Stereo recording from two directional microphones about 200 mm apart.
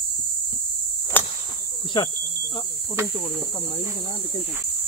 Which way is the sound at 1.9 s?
20° left (ahead or behind).